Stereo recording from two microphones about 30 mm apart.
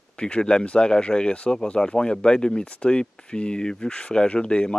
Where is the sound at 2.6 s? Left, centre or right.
Left.